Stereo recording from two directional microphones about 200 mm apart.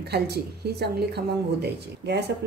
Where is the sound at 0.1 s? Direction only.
55° right (ahead or behind).